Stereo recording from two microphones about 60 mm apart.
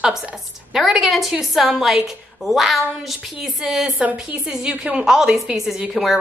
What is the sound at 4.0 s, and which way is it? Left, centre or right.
A woman's voice, right.